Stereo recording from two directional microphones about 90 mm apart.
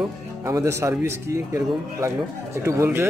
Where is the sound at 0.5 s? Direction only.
35° right (ahead or behind).